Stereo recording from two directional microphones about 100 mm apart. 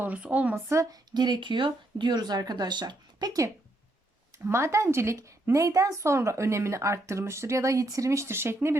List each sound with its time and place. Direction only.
0.0 s speech: 15° right (ahead or behind)
0.7 s a woman's voice: 30° right (ahead or behind)
1.1 s speech: 45° right (ahead or behind)
4.4 s a woman's voice: 25° right (ahead or behind)